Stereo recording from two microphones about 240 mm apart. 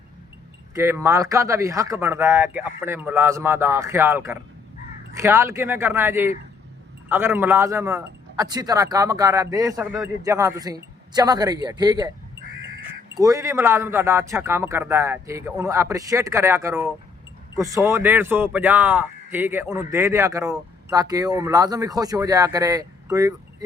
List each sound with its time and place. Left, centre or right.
0.7 s speech: centre
13.1 s speech: centre